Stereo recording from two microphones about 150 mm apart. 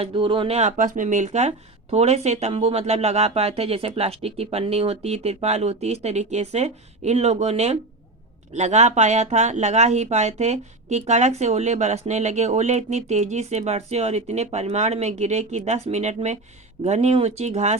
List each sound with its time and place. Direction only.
0.0 s speech: 35° right (ahead or behind)
0.8 s speech: 60° right (ahead or behind)